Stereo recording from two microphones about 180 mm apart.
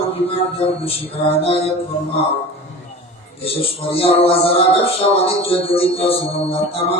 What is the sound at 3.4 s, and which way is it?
Speech, 30° left (ahead or behind).